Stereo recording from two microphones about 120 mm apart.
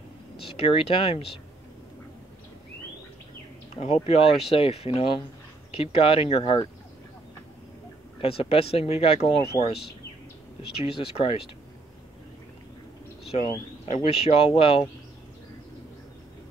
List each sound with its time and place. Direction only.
0.4 s speech: 50° left (ahead or behind)
3.7 s speech: 55° left (ahead or behind)
8.2 s speech: 55° left (ahead or behind)
10.9 s speech: 50° left (ahead or behind)
13.8 s speech: 60° left (ahead or behind)